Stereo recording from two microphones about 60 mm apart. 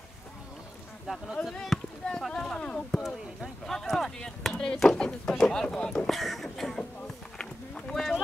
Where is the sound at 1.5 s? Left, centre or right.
Centre.